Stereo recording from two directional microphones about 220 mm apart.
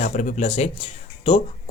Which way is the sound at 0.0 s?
35° left (ahead or behind).